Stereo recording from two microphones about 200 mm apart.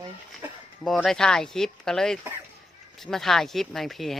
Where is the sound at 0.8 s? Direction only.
Centre (ahead or behind).